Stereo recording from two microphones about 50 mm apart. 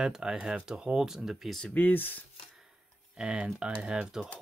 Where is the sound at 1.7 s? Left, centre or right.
Left.